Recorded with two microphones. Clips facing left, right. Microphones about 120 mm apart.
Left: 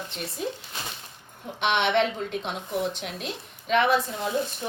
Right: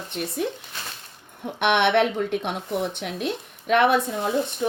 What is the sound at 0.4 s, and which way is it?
Speech, 60° right (ahead or behind).